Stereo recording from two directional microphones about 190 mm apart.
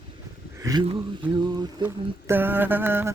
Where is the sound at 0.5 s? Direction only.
20° right (ahead or behind).